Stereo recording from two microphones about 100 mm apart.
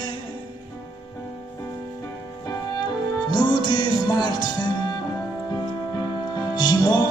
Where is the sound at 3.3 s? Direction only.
45° left (ahead or behind).